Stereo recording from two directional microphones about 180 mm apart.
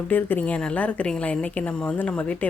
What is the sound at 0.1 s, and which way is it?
A woman's voice, 10° left (ahead or behind).